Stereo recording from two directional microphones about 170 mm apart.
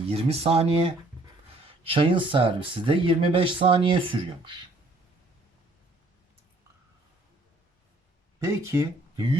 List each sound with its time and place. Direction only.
0.1 s speech: 35° right (ahead or behind)
8.4 s speech: 20° right (ahead or behind)